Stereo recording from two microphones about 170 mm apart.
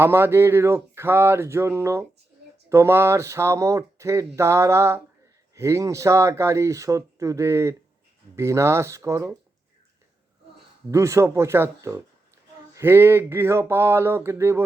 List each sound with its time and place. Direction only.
0.0 s speech: 15° right (ahead or behind)
10.9 s speech: 15° right (ahead or behind)